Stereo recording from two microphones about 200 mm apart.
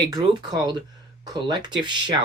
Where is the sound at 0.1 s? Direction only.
20° right (ahead or behind).